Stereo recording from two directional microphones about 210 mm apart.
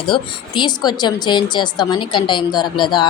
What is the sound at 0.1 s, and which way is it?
A woman's voice, 20° left (ahead or behind).